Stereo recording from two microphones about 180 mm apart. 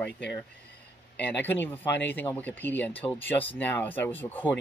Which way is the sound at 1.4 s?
10° left (ahead or behind).